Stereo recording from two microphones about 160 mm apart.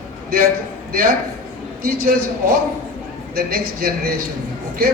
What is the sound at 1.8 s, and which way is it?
A man's voice, 60° right (ahead or behind).